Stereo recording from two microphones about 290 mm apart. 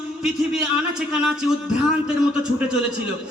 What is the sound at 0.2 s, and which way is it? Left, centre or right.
A man's voice, centre.